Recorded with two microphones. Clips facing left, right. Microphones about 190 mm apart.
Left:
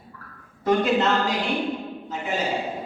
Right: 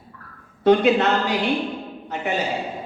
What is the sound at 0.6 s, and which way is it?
A woman's voice, 70° right (ahead or behind).